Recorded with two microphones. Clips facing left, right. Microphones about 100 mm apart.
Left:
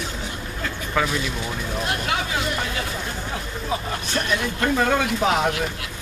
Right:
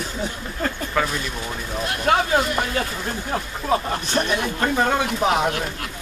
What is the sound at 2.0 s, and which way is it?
Speech, 45° right (ahead or behind).